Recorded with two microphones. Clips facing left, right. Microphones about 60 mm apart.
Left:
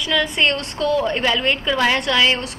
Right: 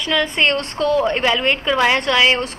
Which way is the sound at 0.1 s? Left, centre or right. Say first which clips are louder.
Right 1 dB; centre.